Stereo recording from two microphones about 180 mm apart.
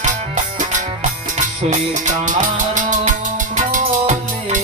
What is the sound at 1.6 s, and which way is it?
Music, 45° right (ahead or behind).